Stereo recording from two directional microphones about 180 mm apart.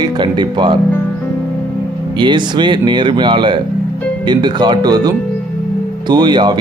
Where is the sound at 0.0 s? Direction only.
25° right (ahead or behind).